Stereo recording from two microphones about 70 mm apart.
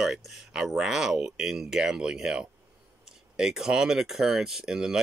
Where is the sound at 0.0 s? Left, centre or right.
Centre.